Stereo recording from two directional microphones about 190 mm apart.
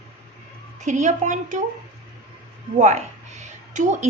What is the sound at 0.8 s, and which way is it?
Speech, 40° right (ahead or behind).